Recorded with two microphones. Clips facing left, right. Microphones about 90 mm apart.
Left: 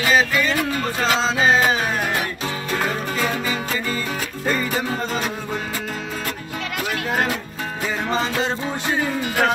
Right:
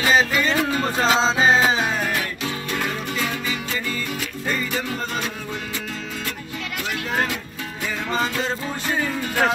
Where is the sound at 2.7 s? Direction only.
35° left (ahead or behind).